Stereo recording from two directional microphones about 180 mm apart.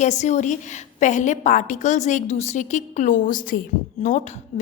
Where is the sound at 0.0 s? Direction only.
40° left (ahead or behind).